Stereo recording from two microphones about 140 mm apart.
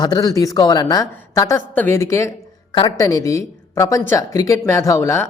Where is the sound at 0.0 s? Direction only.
30° left (ahead or behind).